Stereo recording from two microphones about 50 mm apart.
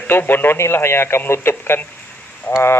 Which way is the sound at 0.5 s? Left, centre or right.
Left.